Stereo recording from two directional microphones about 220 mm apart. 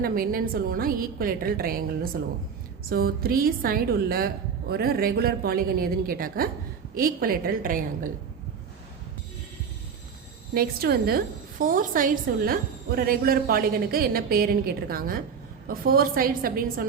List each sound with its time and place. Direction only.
0.0 s a woman's voice: 40° right (ahead or behind)
2.9 s a woman's voice: 40° right (ahead or behind)
10.5 s a woman's voice: 45° right (ahead or behind)